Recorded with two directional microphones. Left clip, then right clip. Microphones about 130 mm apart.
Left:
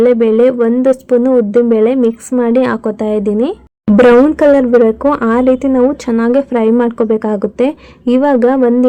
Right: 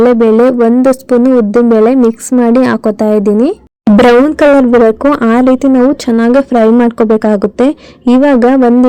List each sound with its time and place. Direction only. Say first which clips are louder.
0.0 s speech: right 2 dB; 45° right (ahead or behind)
2.5 s speech: right 3 dB; 50° right (ahead or behind)
3.9 s speech: right 1 dB; 35° right (ahead or behind)